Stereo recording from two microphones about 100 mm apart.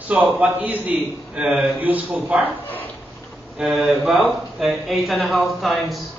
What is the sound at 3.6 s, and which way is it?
Speech, centre (ahead or behind).